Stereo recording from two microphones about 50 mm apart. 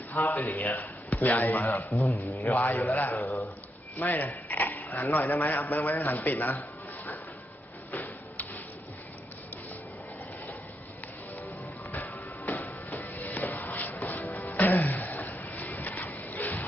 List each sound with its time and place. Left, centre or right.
0.1 s a man's voice: left
2.1 s a man's voice: left
2.6 s a man's voice: left
3.1 s speech: left
3.9 s a man's voice: left
7.9 s a sound: left
11.9 s music: left